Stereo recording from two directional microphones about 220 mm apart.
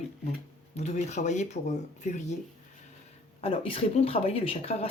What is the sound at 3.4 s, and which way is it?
Speech, 25° left (ahead or behind).